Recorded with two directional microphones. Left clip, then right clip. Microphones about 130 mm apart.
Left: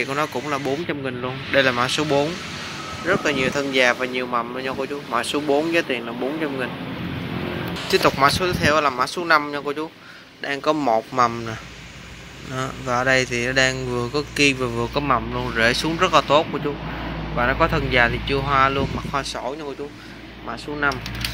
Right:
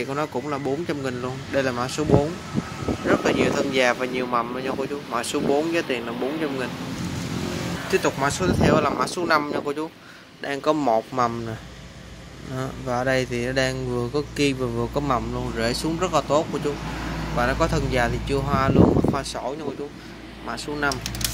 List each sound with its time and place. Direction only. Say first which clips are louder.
0.0 s speech: left 4 dB; 15° right (ahead or behind)
1.2 s speech: left 8 dB; 5° right (ahead or behind)
3.1 s speech: even; 15° right (ahead or behind)
4.6 s speech: left 1 dB; 5° right (ahead or behind)
7.9 s speech: left 6 dB; 5° left (ahead or behind)
8.4 s speech: left 1 dB; 10° right (ahead or behind)
12.8 s speech: left 4 dB; 10° right (ahead or behind)
20.8 s speech: left 3 dB; 15° right (ahead or behind)